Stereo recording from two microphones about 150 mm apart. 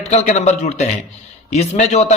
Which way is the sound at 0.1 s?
45° left (ahead or behind).